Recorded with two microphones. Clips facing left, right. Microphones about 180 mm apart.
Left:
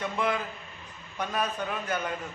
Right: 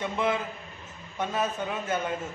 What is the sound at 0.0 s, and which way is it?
A man's voice, 25° right (ahead or behind).